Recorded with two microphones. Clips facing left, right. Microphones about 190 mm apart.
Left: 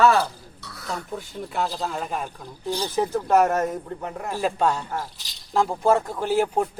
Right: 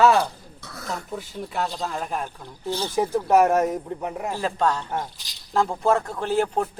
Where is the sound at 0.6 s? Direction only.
50° right (ahead or behind).